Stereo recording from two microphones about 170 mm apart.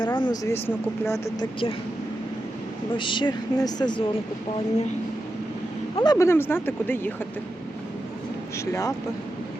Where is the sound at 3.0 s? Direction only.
30° left (ahead or behind).